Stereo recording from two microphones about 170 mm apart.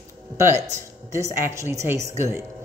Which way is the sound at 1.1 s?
15° right (ahead or behind).